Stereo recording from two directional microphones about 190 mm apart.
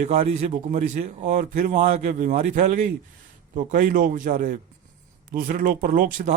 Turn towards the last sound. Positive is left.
turn(degrees=-45)  # may be behind; listen again after turning